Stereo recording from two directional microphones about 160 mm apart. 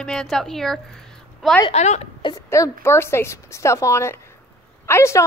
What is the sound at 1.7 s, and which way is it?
Speech, 45° left (ahead or behind).